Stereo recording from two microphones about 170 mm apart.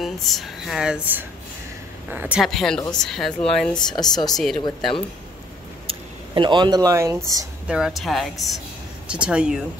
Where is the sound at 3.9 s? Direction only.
25° left (ahead or behind).